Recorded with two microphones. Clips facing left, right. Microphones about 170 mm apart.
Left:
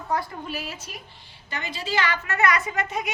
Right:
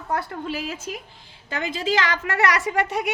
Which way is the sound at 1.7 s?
90° right.